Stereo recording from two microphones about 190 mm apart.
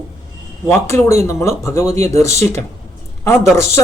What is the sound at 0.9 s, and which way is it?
Speech, 15° left (ahead or behind).